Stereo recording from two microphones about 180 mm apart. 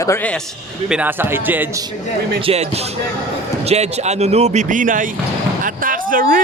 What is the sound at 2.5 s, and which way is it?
A man's voice, 35° right (ahead or behind).